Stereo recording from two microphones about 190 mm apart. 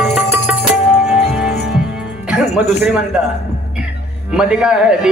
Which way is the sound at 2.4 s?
35° left (ahead or behind).